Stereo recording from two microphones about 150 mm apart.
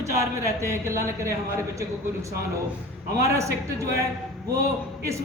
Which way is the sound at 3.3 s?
20° right (ahead or behind).